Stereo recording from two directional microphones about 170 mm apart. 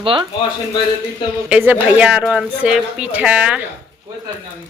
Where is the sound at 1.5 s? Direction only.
10° right (ahead or behind).